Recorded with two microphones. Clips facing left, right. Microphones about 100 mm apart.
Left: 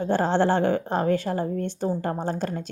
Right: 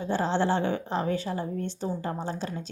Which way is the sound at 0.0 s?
55° left (ahead or behind).